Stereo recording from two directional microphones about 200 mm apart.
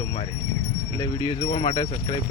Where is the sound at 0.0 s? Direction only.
20° left (ahead or behind).